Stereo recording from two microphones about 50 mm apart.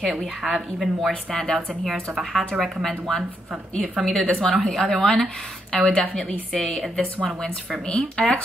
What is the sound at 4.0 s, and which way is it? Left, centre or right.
A woman's voice, centre.